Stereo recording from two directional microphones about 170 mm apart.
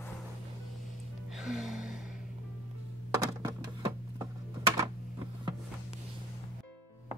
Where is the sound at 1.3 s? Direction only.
Centre (ahead or behind).